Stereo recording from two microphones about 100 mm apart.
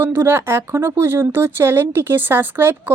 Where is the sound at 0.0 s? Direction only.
20° right (ahead or behind).